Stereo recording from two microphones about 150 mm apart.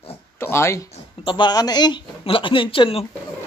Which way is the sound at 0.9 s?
35° left (ahead or behind).